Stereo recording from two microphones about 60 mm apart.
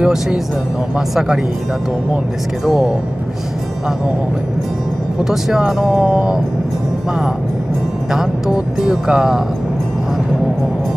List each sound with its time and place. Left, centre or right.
0.0 s speech: centre
2.6 s speech: centre
5.2 s speech: centre
8.1 s speech: centre